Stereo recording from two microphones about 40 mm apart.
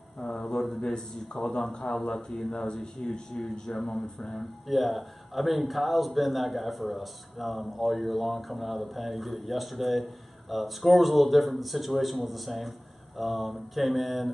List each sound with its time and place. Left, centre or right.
0.3 s mantra: centre
0.7 s a man's voice: centre
4.3 s speech: centre